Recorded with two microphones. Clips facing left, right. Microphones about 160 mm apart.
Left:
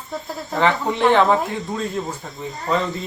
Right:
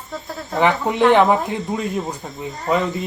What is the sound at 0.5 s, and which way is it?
Speech, 15° right (ahead or behind).